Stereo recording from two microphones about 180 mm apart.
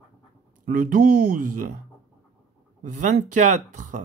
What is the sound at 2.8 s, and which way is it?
Speech, 45° right (ahead or behind).